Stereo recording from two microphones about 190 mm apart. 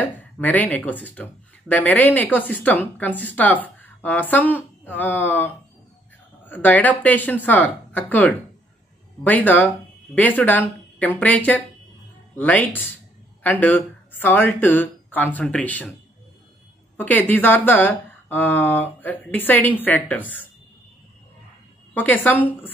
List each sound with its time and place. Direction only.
0.0 s speech: 10° left (ahead or behind)
16.9 s speech: 10° left (ahead or behind)
21.9 s speech: 10° left (ahead or behind)